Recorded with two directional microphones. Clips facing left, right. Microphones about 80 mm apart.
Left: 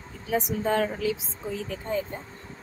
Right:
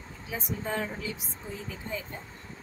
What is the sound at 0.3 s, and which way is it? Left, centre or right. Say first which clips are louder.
Speech: left 8 dB; left.